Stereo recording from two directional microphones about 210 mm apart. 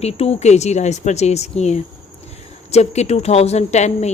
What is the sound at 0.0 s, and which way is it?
A woman's voice, 30° left (ahead or behind).